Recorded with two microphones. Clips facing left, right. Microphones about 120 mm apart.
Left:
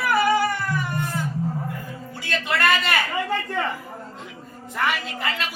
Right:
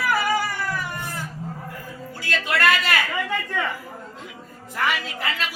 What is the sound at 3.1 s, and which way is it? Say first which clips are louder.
Speech: left 2 dB; 35° left (ahead or behind).